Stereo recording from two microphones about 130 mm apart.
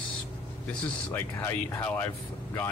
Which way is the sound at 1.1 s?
15° left (ahead or behind).